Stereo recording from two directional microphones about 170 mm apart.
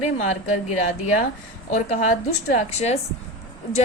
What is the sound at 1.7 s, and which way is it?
A woman's voice, 45° left (ahead or behind).